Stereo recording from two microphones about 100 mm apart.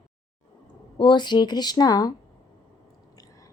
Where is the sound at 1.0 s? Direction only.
50° left (ahead or behind).